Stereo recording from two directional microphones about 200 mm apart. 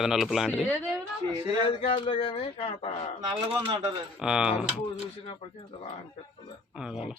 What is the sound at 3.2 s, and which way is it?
Speech, 20° right (ahead or behind).